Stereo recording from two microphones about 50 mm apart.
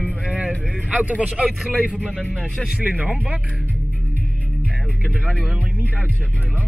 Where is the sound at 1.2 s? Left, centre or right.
Right.